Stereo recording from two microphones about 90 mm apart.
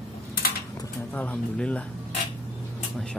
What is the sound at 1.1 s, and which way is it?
Speech, 15° left (ahead or behind).